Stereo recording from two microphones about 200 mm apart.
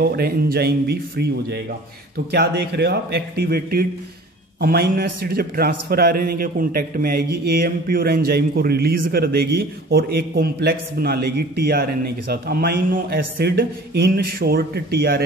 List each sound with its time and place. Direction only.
0.0 s a man's voice: 50° right (ahead or behind)